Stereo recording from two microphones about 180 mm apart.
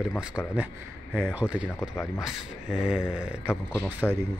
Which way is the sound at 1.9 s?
10° left (ahead or behind).